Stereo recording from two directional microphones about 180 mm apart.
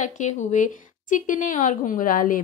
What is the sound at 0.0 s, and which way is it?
A woman's voice, 40° left (ahead or behind).